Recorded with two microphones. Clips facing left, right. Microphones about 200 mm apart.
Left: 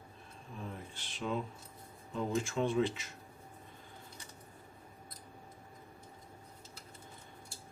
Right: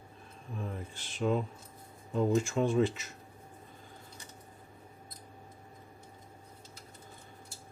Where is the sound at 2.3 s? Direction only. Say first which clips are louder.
Right 3 dB; 45° right (ahead or behind).